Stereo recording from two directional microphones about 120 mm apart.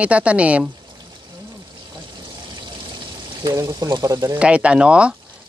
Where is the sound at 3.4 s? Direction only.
30° right (ahead or behind).